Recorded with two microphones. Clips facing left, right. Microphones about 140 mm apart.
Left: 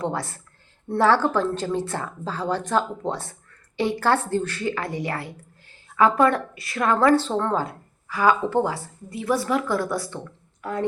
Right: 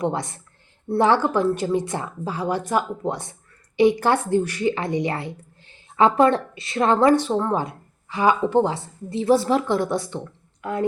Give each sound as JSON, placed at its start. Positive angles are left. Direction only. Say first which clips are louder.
{"t": 0.0, "sound": "a woman's voice", "louder": "right 3 dB", "side_deg": -20}